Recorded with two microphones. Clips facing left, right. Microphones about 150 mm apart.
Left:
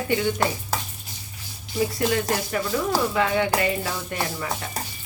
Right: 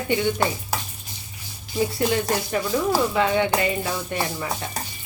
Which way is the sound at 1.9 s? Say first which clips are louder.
Right 1 dB; 25° right (ahead or behind).